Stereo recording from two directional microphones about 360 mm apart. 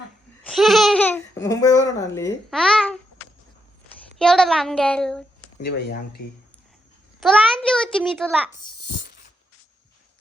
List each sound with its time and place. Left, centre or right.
0.4 s speech: centre
4.2 s a child's voice: centre
5.6 s speech: left
7.2 s a child's voice: centre
9.0 s a sound: left